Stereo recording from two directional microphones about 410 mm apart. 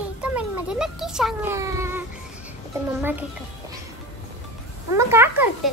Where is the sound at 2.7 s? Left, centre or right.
Centre.